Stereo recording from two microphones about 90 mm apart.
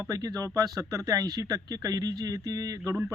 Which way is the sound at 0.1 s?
40° right (ahead or behind).